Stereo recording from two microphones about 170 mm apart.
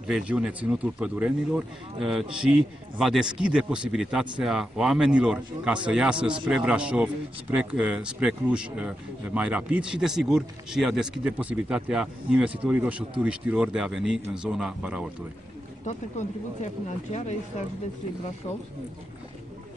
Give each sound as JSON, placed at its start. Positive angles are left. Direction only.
{"t": 0.0, "sound": "speech", "side_deg": -5}
{"t": 15.8, "sound": "speech", "side_deg": 45}